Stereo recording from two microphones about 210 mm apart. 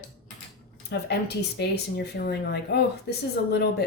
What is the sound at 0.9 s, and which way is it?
Speech, 50° left (ahead or behind).